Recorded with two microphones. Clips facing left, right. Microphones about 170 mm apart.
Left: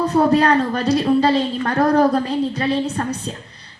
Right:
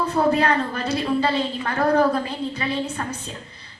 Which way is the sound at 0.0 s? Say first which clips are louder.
Left 5 dB; 35° left (ahead or behind).